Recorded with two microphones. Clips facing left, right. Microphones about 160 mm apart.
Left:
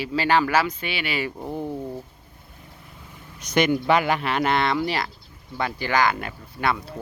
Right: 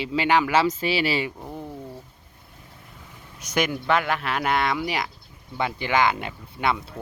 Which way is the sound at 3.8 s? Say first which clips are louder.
Left 3 dB; 5° left (ahead or behind).